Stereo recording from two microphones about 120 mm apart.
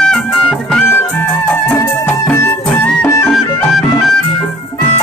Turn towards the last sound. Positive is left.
turn(degrees=0)  # may be behind; listen again after turning